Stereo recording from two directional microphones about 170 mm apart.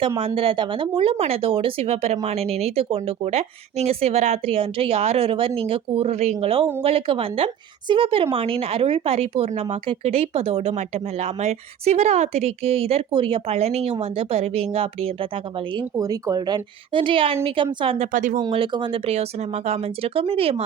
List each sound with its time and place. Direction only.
0.2 s speech: 35° right (ahead or behind)
18.3 s speech: 30° right (ahead or behind)